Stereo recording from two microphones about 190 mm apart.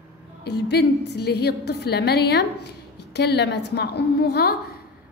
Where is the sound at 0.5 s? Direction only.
60° left (ahead or behind).